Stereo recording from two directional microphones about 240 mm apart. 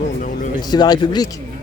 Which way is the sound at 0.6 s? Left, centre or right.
Centre.